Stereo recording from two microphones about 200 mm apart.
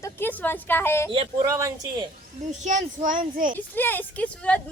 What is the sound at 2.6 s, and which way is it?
Speech, 40° right (ahead or behind).